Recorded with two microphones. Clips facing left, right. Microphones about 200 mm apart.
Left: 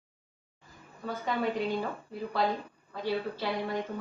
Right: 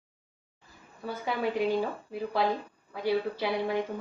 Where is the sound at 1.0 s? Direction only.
10° right (ahead or behind).